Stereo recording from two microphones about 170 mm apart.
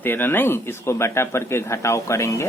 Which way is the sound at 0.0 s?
10° left (ahead or behind).